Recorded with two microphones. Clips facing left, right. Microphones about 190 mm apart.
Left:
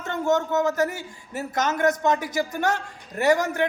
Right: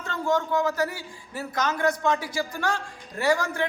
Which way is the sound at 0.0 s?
25° left (ahead or behind).